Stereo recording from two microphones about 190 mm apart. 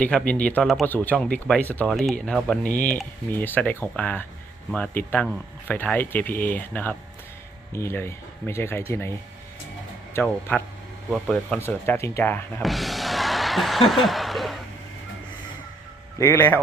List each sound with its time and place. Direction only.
0.0 s speech: 5° left (ahead or behind)
10.2 s speech: 10° left (ahead or behind)
16.1 s speech: 15° left (ahead or behind)